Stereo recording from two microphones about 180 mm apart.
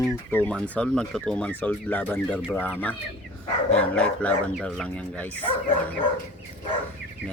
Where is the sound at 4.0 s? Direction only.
5° left (ahead or behind).